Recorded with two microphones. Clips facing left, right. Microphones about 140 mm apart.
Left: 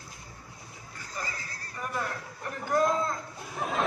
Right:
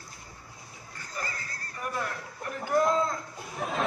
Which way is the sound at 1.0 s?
10° left (ahead or behind).